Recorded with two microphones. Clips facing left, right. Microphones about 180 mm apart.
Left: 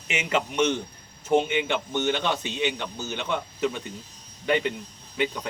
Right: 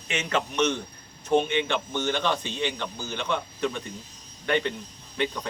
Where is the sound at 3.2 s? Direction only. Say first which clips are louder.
Left 1 dB; 5° left (ahead or behind).